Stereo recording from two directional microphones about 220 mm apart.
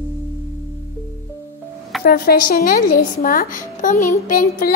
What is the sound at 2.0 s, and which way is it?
Speech, 45° left (ahead or behind).